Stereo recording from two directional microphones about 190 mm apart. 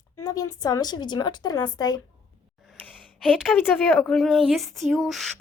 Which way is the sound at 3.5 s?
10° left (ahead or behind).